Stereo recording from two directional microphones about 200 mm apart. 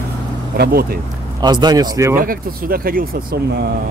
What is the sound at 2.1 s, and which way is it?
Speech, 45° right (ahead or behind).